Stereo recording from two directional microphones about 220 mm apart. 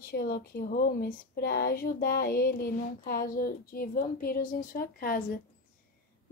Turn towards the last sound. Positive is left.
turn(degrees=40)  # may be behind; listen again after turning